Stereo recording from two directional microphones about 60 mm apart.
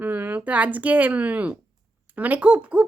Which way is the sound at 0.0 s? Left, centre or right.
Right.